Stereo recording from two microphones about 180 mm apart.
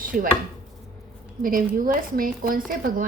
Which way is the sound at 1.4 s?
50° right (ahead or behind).